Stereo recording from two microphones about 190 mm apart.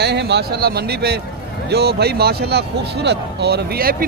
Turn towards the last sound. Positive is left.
turn(degrees=-50)  # may be behind; listen again after turning